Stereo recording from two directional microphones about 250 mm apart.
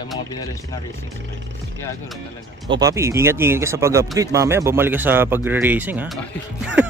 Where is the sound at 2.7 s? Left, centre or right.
Centre.